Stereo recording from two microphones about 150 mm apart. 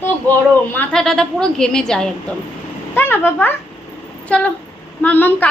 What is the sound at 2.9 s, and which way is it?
Speech, 15° left (ahead or behind).